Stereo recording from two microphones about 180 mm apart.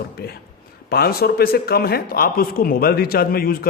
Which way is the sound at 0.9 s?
60° left (ahead or behind).